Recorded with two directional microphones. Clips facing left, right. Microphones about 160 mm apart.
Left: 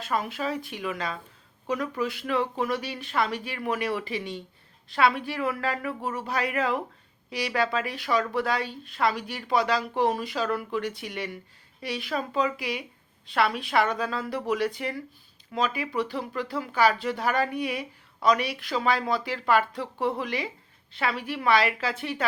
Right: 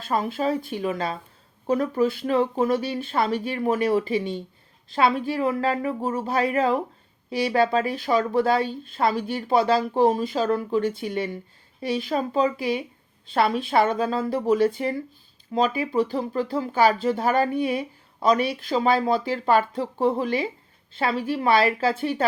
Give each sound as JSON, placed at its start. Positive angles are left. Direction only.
{"t": 0.1, "sound": "speech", "side_deg": -30}